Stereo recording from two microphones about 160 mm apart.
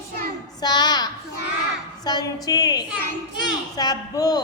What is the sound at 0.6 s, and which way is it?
A woman's voice, 25° left (ahead or behind).